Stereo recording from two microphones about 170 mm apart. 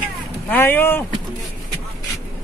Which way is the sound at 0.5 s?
10° left (ahead or behind).